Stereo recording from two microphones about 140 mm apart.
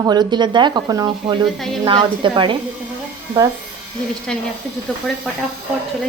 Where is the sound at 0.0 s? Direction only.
30° right (ahead or behind).